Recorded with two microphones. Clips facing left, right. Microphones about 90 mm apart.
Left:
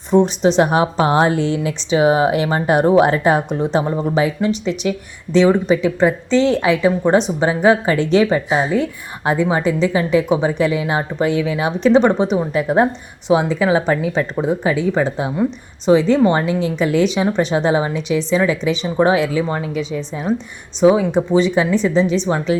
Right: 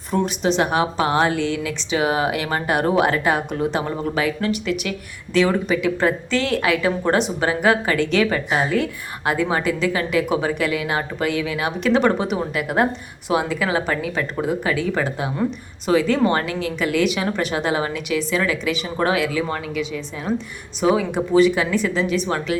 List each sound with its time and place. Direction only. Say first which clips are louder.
0.1 s a woman's voice: left 7 dB; 30° left (ahead or behind)
17.2 s a woman's voice: left 6 dB; 20° left (ahead or behind)
19.7 s a woman's voice: left 4 dB; 35° left (ahead or behind)
20.8 s a woman's voice: left 6 dB; 15° left (ahead or behind)